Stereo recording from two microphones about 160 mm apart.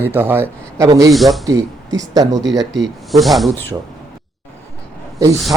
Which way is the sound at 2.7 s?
Centre (ahead or behind).